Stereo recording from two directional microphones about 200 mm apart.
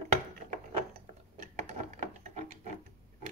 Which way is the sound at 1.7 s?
35° right (ahead or behind).